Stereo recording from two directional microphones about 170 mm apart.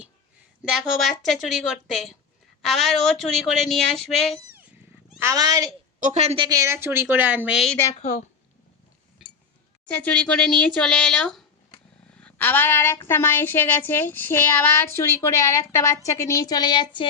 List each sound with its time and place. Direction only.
0.6 s speech: centre (ahead or behind)
5.2 s speech: 20° right (ahead or behind)
6.0 s a woman's voice: 45° right (ahead or behind)
6.5 s a woman's voice: 15° right (ahead or behind)
7.9 s a woman's voice: 40° left (ahead or behind)
9.9 s a woman's voice: 10° left (ahead or behind); by 17.1 s 25° left (ahead or behind)